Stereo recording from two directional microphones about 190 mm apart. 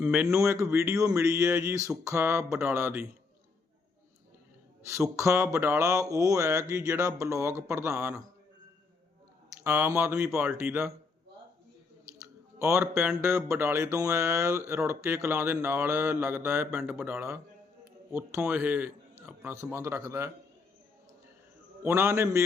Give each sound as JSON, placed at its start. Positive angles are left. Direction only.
{"t": 0.0, "sound": "mantra", "side_deg": -10}
{"t": 4.9, "sound": "mantra", "side_deg": -15}
{"t": 9.6, "sound": "mantra", "side_deg": -10}
{"t": 12.5, "sound": "mantra", "side_deg": -15}
{"t": 21.8, "sound": "mantra", "side_deg": -10}